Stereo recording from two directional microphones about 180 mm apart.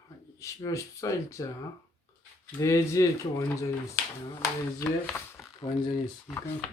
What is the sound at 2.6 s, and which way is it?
A man's voice, 15° left (ahead or behind).